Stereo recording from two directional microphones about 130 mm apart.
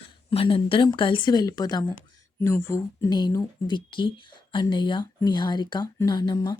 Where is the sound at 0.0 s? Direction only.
45° left (ahead or behind).